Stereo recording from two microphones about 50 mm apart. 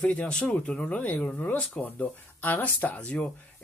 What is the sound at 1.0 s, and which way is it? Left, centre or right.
Speech, left.